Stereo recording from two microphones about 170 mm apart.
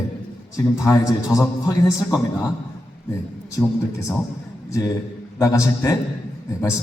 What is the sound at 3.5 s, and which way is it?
Speech, 20° left (ahead or behind).